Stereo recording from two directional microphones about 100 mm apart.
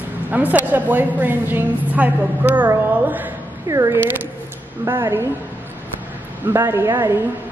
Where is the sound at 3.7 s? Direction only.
35° right (ahead or behind).